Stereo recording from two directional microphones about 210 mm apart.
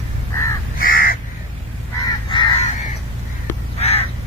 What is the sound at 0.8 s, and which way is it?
Crow, 45° left (ahead or behind).